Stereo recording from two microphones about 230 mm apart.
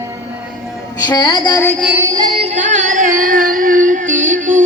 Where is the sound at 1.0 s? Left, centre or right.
Centre.